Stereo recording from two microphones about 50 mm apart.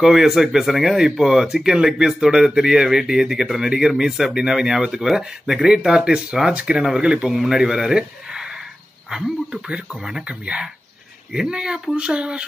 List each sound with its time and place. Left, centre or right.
0.0 s speech: centre
7.3 s speech: centre
10.2 s speech: right